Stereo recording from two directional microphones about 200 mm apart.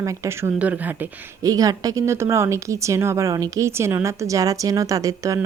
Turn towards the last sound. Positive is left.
turn(degrees=-15)  # may be behind; listen again after turning